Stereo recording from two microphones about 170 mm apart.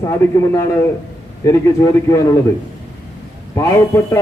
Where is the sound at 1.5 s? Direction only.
20° left (ahead or behind).